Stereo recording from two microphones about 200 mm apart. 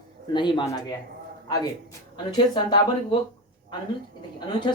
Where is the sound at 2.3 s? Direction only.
20° left (ahead or behind).